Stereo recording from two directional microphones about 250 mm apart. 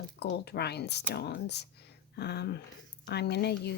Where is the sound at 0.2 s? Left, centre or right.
Left.